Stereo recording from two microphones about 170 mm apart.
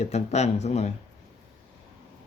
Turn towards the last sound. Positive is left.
turn(degrees=40)  # may be behind; listen again after turning